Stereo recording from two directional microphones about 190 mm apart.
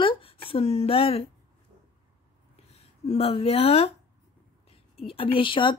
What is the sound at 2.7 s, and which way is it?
Speech, 30° left (ahead or behind).